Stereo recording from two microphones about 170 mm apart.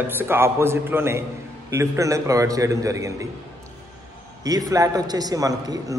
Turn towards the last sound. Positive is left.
turn(degrees=-20)  # may be behind; listen again after turning